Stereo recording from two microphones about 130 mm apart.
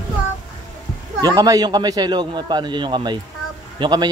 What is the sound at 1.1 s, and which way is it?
A man's voice, 25° right (ahead or behind).